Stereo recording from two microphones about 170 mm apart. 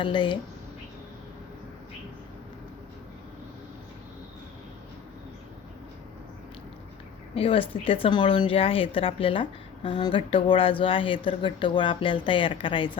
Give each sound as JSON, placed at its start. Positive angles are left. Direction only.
{"t": 0.0, "sound": "speech", "side_deg": 30}
{"t": 7.3, "sound": "speech", "side_deg": 35}